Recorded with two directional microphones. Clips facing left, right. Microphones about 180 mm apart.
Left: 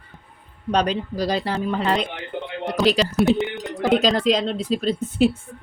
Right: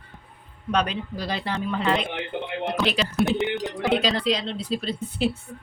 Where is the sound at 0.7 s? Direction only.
35° left (ahead or behind).